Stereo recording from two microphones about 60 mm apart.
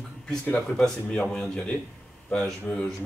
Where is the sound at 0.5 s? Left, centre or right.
Centre.